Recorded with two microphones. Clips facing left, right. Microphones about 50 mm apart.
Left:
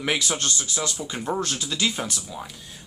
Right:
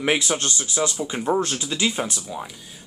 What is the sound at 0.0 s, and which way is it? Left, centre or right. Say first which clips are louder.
Speech: right 3 dB; centre.